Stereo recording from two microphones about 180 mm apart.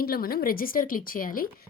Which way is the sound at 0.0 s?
55° left (ahead or behind).